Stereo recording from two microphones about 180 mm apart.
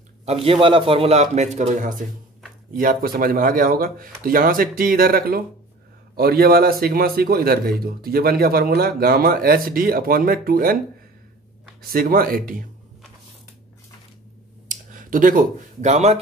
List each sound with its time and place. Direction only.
0.2 s a man's voice: 35° right (ahead or behind); by 10.8 s 55° right (ahead or behind)
11.8 s speech: 55° right (ahead or behind)
14.7 s speech: 45° right (ahead or behind)